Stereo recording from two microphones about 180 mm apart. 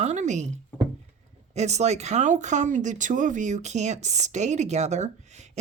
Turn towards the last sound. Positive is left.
turn(degrees=-40)  # may be behind; listen again after turning